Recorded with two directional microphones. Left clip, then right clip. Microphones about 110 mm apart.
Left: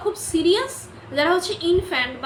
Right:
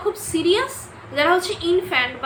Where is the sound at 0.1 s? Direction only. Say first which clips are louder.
Even; 30° left (ahead or behind).